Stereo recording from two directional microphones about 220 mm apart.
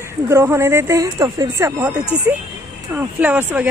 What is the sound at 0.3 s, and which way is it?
A woman's voice, 10° right (ahead or behind).